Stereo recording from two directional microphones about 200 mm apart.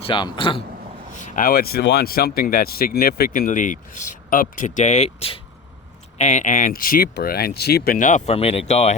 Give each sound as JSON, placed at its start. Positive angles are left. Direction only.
{"t": 0.0, "sound": "a man's voice", "side_deg": 25}
{"t": 1.2, "sound": "speech", "side_deg": 45}